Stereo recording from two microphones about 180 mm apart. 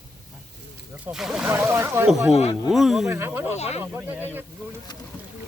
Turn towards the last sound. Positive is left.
turn(degrees=-10)  # may be behind; listen again after turning